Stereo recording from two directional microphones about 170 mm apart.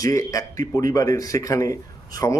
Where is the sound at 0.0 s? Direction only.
20° left (ahead or behind).